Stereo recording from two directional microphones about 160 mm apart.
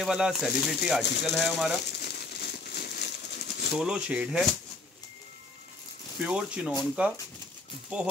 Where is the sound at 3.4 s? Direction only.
90° left.